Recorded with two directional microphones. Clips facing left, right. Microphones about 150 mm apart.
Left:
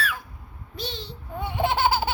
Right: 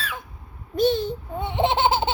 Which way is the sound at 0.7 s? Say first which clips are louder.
Right 15 dB; 50° right (ahead or behind).